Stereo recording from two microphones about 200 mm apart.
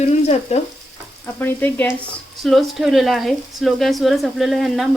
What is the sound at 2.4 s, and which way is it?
Speech, centre (ahead or behind).